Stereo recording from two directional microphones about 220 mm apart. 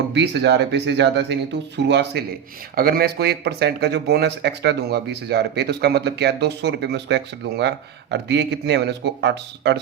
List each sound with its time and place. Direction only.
0.1 s speech: 50° right (ahead or behind)